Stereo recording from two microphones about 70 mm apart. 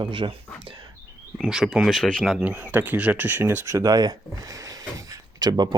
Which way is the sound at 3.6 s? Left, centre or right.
Right.